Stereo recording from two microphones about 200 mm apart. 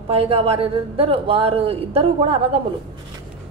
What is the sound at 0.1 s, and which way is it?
A woman's voice, 30° right (ahead or behind).